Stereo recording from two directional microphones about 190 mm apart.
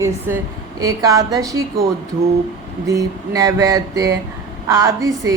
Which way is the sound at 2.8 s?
15° right (ahead or behind).